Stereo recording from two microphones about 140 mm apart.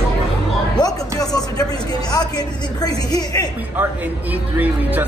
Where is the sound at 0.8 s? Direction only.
30° left (ahead or behind).